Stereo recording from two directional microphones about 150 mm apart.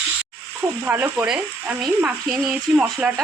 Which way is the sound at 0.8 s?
10° right (ahead or behind).